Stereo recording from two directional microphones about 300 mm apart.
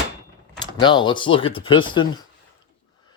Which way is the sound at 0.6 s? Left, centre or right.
Centre.